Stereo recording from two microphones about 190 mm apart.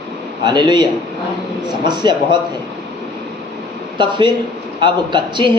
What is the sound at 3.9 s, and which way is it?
A man's voice, 25° right (ahead or behind).